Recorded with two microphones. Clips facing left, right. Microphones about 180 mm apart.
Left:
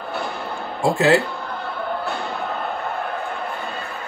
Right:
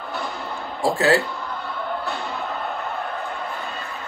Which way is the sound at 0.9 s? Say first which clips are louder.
Left 2 dB; 20° left (ahead or behind).